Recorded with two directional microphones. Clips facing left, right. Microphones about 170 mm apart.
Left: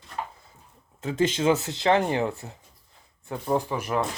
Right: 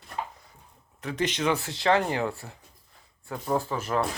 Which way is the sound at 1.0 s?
25° left (ahead or behind).